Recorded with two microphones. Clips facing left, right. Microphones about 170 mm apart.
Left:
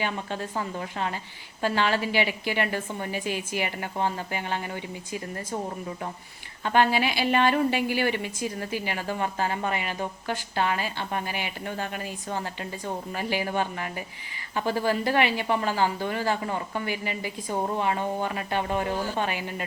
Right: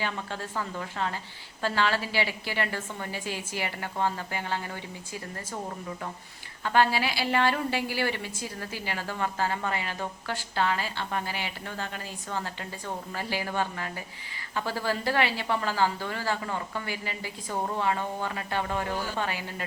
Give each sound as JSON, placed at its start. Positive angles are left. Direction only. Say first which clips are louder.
{"t": 0.0, "sound": "a woman's voice", "louder": "left 3 dB", "side_deg": 20}
{"t": 6.7, "sound": "a woman's voice", "louder": "left 2 dB", "side_deg": 20}